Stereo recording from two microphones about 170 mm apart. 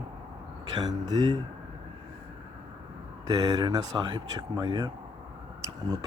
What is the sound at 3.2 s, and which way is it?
Speech, 20° right (ahead or behind).